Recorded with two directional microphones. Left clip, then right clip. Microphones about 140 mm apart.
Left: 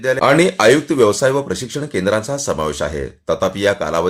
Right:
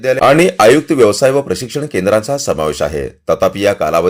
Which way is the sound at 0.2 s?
25° right (ahead or behind).